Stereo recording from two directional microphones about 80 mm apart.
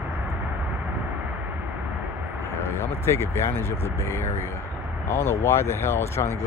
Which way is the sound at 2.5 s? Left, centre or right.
Left.